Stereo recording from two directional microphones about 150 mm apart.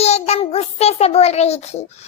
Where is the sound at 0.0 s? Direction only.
45° left (ahead or behind).